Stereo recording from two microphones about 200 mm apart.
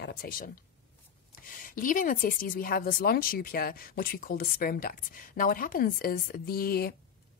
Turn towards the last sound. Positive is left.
turn(degrees=50)  # may be behind; listen again after turning